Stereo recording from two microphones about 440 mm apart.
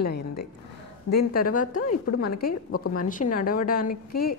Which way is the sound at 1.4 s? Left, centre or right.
Centre.